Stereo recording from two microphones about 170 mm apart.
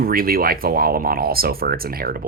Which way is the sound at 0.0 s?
60° right (ahead or behind).